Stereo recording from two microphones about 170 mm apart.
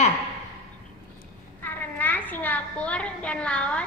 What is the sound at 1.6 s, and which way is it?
A woman's voice, 10° left (ahead or behind).